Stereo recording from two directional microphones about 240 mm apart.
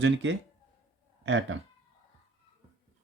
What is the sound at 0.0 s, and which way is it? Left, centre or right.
Speech, right.